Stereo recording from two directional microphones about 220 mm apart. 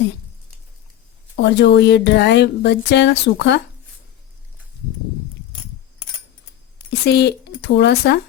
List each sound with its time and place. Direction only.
1.4 s speech: 50° left (ahead or behind)
7.0 s speech: 50° left (ahead or behind)